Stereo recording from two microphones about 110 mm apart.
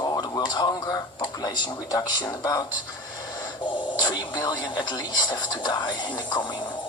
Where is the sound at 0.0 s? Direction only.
35° left (ahead or behind).